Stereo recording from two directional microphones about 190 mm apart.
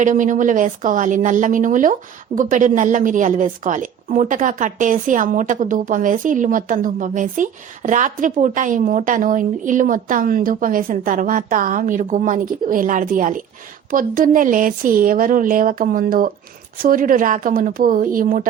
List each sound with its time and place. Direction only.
0.0 s a woman's voice: 45° right (ahead or behind)